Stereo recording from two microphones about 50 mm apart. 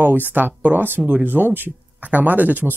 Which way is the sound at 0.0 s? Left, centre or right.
Right.